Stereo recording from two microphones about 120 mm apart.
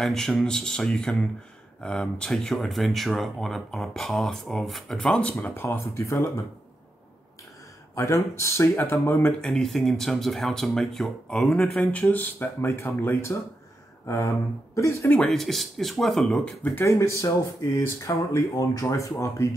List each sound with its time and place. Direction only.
0.0 s speech: 5° left (ahead or behind); by 6.4 s 25° left (ahead or behind)
7.9 s speech: 25° left (ahead or behind)
9.4 s speech: 5° left (ahead or behind); by 15.1 s 25° left (ahead or behind)
15.1 s speech: 5° left (ahead or behind)
16.6 s speech: 20° left (ahead or behind)